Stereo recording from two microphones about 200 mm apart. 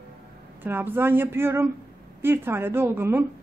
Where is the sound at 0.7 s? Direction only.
10° right (ahead or behind).